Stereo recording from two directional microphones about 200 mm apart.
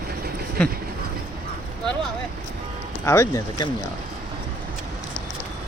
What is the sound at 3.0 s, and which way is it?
Speech, 15° left (ahead or behind).